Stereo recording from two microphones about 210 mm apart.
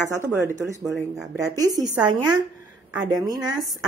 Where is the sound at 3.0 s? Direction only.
15° right (ahead or behind).